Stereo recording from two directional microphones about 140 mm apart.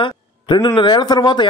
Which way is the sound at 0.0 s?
35° left (ahead or behind).